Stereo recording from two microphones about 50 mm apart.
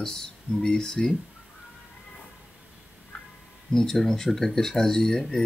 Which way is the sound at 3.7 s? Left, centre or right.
Centre.